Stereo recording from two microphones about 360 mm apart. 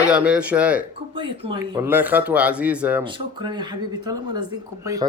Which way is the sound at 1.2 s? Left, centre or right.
Centre.